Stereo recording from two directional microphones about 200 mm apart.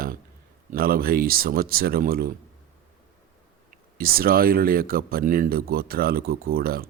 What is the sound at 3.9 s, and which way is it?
A man's voice, 50° right (ahead or behind).